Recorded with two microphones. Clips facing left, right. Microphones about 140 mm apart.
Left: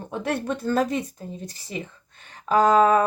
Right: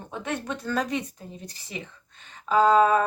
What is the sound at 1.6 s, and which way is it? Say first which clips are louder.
Speech: left 5 dB; 35° left (ahead or behind).